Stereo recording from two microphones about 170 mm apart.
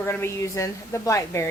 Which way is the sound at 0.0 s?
15° left (ahead or behind).